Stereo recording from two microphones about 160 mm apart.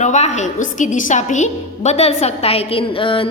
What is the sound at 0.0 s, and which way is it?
A woman's voice, 45° left (ahead or behind).